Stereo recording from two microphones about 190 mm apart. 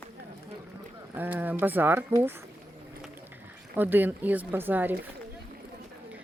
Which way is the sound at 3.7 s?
10° right (ahead or behind).